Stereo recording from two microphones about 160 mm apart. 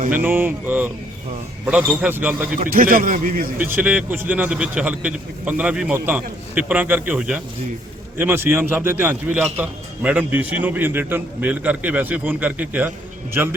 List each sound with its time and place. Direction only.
0.1 s a man's voice: 10° right (ahead or behind)
2.6 s a man's voice: 65° right (ahead or behind)
3.6 s a man's voice: 10° right (ahead or behind)